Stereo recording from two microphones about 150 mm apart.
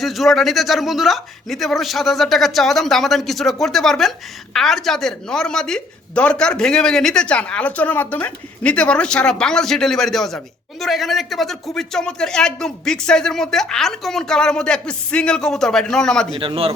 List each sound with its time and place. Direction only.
0.0 s a woman's voice: centre (ahead or behind)
16.4 s speech: 40° right (ahead or behind)